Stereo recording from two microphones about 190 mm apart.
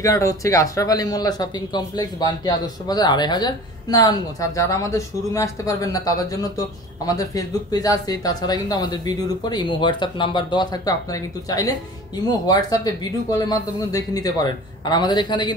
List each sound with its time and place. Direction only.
0.0 s speech: 15° left (ahead or behind)